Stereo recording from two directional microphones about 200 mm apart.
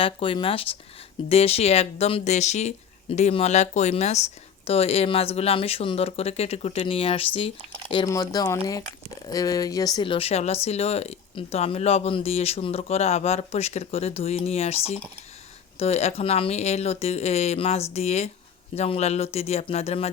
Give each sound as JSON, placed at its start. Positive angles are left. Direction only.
{"t": 0.0, "sound": "speech", "side_deg": 25}
{"t": 8.0, "sound": "speech", "side_deg": 15}